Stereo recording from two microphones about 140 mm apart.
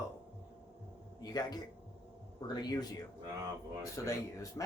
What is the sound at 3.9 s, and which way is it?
Speech, 20° left (ahead or behind).